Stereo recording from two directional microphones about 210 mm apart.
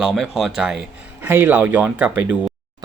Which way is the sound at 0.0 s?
Centre (ahead or behind).